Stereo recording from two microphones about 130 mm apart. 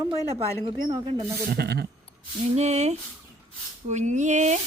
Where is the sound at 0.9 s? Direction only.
40° right (ahead or behind).